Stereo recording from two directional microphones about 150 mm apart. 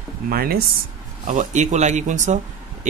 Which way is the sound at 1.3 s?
55° right (ahead or behind).